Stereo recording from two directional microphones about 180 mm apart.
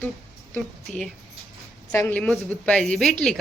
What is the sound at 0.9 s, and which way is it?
Speech, centre (ahead or behind).